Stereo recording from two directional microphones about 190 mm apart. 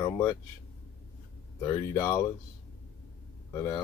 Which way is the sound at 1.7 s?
15° left (ahead or behind).